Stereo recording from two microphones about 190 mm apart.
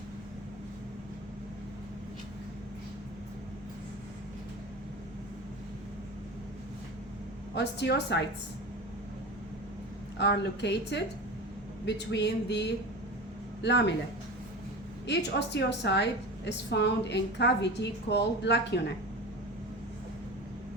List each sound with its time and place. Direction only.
7.5 s a woman's voice: 65° left (ahead or behind)
10.2 s a woman's voice: 65° left (ahead or behind)
15.0 s a woman's voice: 65° left (ahead or behind)